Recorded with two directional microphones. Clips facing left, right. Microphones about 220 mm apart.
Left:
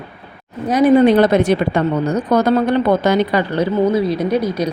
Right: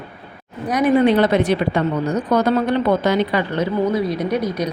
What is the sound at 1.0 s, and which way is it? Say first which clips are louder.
A woman's voice: left 3 dB; 45° left (ahead or behind).